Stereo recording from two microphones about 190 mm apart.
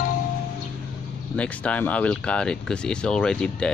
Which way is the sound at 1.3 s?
5° left (ahead or behind).